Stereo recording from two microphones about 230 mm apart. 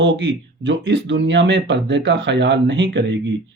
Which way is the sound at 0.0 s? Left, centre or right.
Right.